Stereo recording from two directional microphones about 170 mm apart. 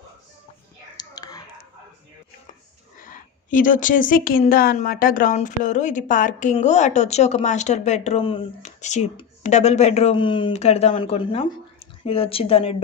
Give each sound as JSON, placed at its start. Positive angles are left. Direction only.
{"t": 0.9, "sound": "whispering", "side_deg": 25}
{"t": 3.0, "sound": "a woman's voice", "side_deg": 50}
{"t": 10.1, "sound": "speech", "side_deg": 30}